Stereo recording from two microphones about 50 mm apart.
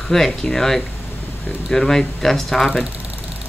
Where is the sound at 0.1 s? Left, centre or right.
Centre.